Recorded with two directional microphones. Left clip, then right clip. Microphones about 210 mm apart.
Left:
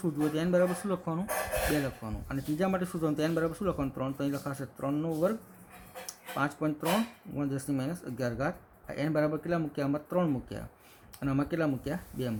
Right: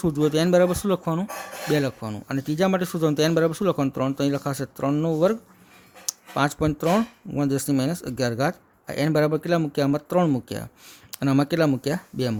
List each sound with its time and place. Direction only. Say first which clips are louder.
0.0 s speech: right 9 dB; 50° right (ahead or behind)